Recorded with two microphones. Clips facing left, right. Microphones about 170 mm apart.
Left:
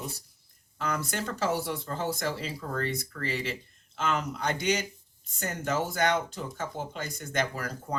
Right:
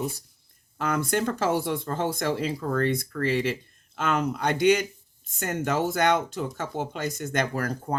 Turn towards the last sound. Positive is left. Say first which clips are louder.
# right 6 dB
turn(degrees=-50)  # may be behind; listen again after turning